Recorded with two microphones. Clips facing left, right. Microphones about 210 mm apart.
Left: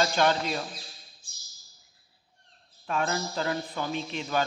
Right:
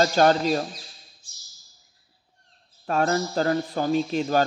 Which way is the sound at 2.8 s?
40° right (ahead or behind).